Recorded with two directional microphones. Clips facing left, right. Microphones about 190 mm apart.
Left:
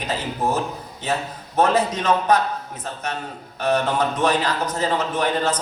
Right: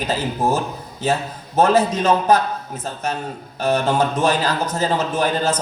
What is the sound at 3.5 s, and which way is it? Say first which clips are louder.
A man's voice: right 2 dB; 30° right (ahead or behind).